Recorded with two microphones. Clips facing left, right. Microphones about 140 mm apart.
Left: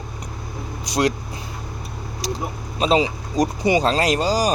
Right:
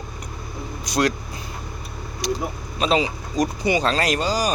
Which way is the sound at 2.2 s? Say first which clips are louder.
Right 3 dB; 35° left (ahead or behind).